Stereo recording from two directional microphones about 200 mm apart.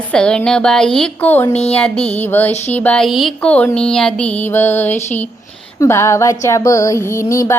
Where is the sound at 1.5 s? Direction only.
30° left (ahead or behind).